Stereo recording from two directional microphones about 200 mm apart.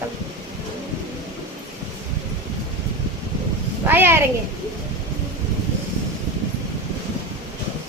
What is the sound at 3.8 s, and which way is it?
Speech, 10° right (ahead or behind).